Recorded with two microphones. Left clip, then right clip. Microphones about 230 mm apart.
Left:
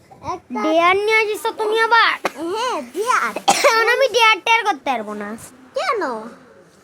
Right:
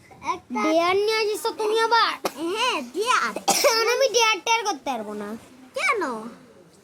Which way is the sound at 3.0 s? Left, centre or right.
Centre.